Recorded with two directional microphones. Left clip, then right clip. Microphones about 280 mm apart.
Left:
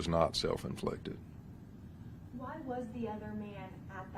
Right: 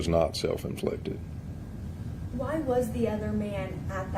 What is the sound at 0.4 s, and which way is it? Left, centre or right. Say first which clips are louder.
Speech: right 6 dB; left.